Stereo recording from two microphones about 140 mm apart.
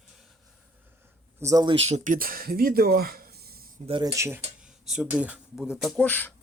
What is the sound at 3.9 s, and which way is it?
Speech, 35° right (ahead or behind).